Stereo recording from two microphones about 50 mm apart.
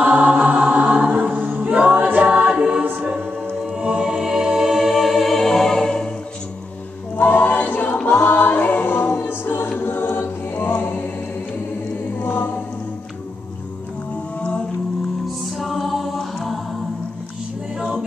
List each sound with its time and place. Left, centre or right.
0.0 s music: right
1.1 s choir: right
1.7 s choir: right
2.8 s music: right; by 6.0 s centre
7.2 s choir: left
8.1 s music: left
9.2 s choir: left
12.2 s music: left
15.4 s a capella: centre